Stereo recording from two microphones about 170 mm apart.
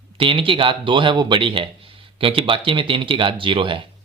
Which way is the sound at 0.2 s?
30° right (ahead or behind).